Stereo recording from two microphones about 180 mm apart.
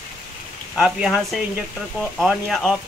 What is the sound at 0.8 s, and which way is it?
Speech, centre (ahead or behind).